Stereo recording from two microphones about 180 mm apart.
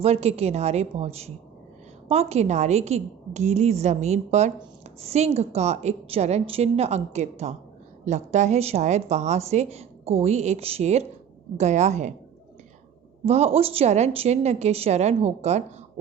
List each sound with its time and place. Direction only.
0.0 s a woman's voice: 35° right (ahead or behind)
13.2 s a woman's voice: 35° right (ahead or behind)